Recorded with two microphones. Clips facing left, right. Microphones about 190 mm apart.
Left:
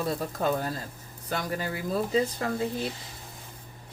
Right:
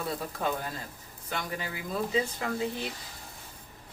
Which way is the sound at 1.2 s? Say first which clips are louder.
Left 4 dB; 40° left (ahead or behind).